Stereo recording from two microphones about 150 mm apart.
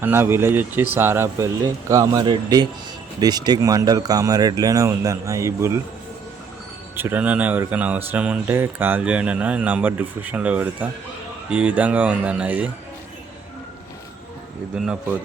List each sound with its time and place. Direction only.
0.0 s speech: 15° right (ahead or behind)
6.9 s speech: 15° right (ahead or behind)
14.8 s speech: 5° right (ahead or behind)